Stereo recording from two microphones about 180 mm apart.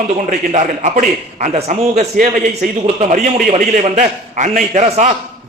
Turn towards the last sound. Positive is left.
turn(degrees=-40)  # may be behind; listen again after turning